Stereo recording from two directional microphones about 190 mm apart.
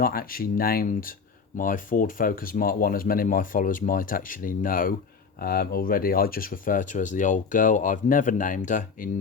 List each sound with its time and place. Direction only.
0.0 s speech: 50° left (ahead or behind)